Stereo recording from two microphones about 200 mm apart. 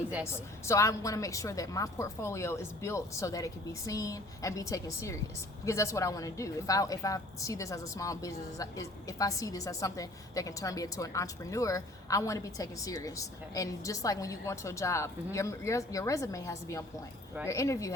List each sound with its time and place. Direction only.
0.3 s a woman's voice: 15° left (ahead or behind)